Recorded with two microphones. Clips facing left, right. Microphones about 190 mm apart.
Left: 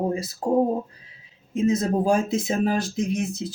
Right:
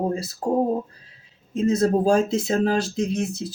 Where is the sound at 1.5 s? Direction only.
15° left (ahead or behind).